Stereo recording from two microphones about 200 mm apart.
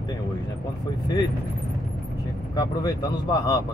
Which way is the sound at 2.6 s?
20° left (ahead or behind).